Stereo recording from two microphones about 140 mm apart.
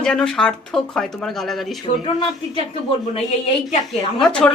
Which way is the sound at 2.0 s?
35° left (ahead or behind).